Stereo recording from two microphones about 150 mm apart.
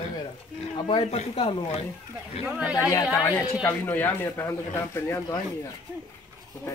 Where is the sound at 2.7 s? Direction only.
25° left (ahead or behind).